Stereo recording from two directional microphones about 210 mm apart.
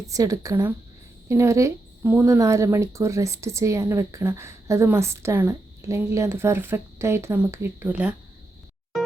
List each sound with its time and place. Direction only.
0.1 s speech: 15° right (ahead or behind)